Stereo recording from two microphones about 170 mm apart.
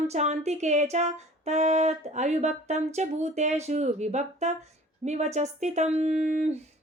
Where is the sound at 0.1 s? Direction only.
40° right (ahead or behind).